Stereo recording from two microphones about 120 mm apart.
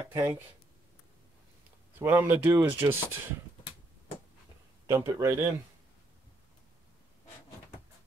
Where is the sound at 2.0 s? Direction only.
15° right (ahead or behind).